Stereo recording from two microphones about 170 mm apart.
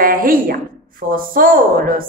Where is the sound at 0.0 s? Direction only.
55° right (ahead or behind).